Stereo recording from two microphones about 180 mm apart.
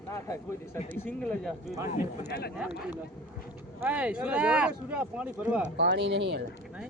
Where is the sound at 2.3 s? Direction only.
60° left (ahead or behind).